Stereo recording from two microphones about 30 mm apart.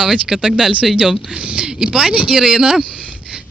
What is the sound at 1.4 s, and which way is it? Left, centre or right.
Speech, right.